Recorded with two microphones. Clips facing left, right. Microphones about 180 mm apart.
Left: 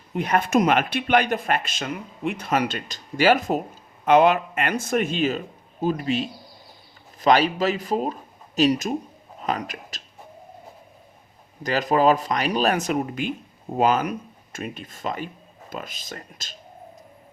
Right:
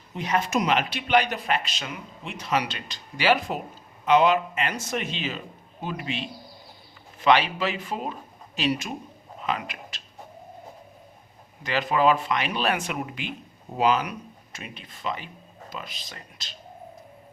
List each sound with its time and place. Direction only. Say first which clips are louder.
0.1 s a man's voice: left 4 dB; 55° left (ahead or behind)
11.6 s a man's voice: left 3 dB; 40° left (ahead or behind)